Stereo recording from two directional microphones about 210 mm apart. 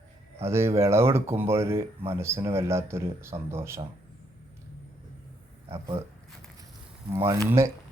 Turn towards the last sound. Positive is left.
turn(degrees=-15)  # may be behind; listen again after turning